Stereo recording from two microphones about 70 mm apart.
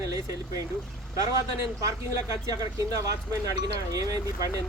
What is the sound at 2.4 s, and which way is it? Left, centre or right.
Speech, right.